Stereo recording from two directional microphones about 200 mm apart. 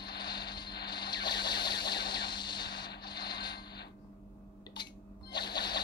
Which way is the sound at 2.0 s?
20° left (ahead or behind).